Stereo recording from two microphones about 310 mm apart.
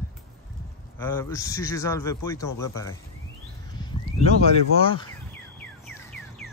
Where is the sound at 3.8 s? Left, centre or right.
Centre.